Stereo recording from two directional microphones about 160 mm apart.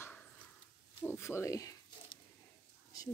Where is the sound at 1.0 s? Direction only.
15° left (ahead or behind).